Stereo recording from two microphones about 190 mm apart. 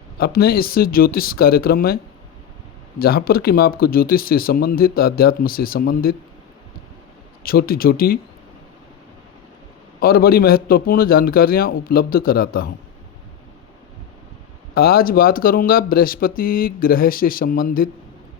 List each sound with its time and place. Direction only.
0.2 s speech: 55° left (ahead or behind)
3.0 s speech: 50° left (ahead or behind)
7.4 s speech: 50° left (ahead or behind)
10.0 s speech: 50° left (ahead or behind)
14.8 s speech: 50° left (ahead or behind)